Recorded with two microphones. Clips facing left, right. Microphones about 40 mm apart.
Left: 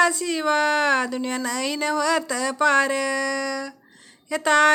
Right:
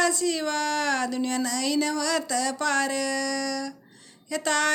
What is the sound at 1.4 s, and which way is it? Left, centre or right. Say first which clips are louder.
Speech: even; left.